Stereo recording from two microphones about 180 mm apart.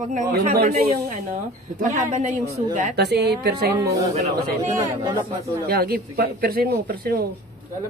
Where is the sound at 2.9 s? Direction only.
65° right (ahead or behind).